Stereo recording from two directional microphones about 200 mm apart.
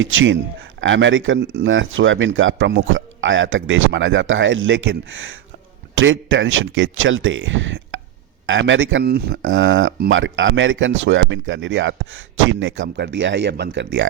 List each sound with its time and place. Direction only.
0.0 s speech: 75° right (ahead or behind)
9.0 s speech: 50° right (ahead or behind)
9.4 s speech: 75° right (ahead or behind)